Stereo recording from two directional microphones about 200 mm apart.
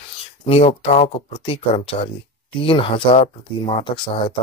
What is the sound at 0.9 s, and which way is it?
Speech, 30° left (ahead or behind).